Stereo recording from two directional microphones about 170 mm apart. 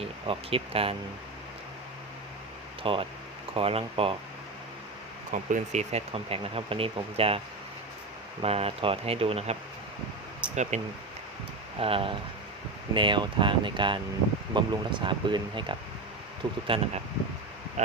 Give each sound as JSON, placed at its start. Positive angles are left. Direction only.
{"t": 0.0, "sound": "speech", "side_deg": -35}
{"t": 2.8, "sound": "speech", "side_deg": -35}
{"t": 5.3, "sound": "speech", "side_deg": -50}
{"t": 11.8, "sound": "speech", "side_deg": -35}
{"t": 17.8, "sound": "speech", "side_deg": -45}